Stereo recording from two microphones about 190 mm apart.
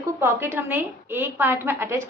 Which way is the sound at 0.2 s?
10° right (ahead or behind).